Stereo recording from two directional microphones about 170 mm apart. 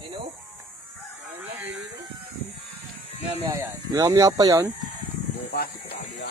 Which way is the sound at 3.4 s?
15° right (ahead or behind).